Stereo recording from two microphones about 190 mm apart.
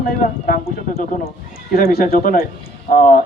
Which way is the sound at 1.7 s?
50° left (ahead or behind).